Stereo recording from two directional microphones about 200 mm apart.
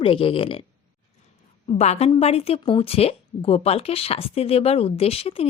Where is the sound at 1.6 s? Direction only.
30° left (ahead or behind).